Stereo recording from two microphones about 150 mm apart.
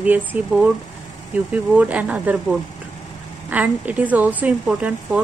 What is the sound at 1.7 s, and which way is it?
A woman's voice, 10° right (ahead or behind).